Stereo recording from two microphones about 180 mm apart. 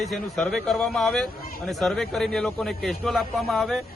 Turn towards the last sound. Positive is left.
turn(degrees=0)  # may be behind; listen again after turning